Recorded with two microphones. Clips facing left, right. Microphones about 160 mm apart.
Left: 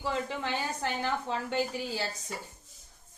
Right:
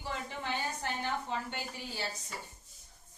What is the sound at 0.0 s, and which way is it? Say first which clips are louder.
A woman's voice: left 7 dB; 90° left.